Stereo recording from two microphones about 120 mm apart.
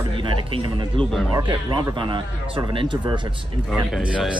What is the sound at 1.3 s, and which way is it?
Speech, 40° right (ahead or behind).